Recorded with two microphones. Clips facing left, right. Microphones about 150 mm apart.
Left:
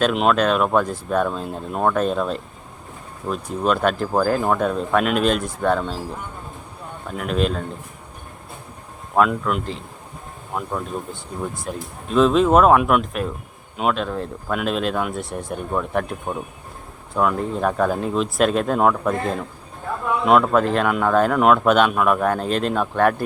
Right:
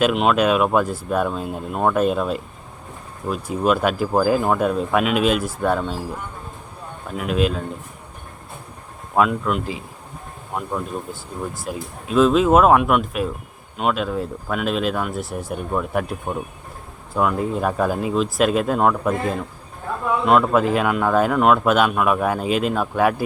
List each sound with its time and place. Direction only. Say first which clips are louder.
0.0 s speech: right 1 dB; 5° right (ahead or behind)
7.2 s speech: right 1 dB; 5° right (ahead or behind)
9.1 s speech: even; centre (ahead or behind)
20.2 s speech: left 1 dB; centre (ahead or behind)